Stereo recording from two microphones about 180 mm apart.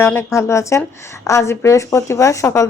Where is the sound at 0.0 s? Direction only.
15° left (ahead or behind).